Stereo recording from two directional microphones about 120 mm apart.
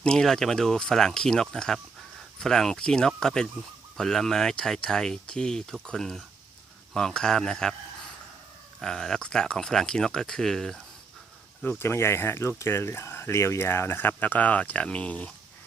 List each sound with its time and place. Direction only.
0.0 s speech: 5° left (ahead or behind)
8.8 s speech: 5° left (ahead or behind)
11.6 s speech: 15° left (ahead or behind)